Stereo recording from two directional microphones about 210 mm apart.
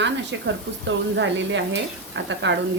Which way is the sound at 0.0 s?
60° right (ahead or behind).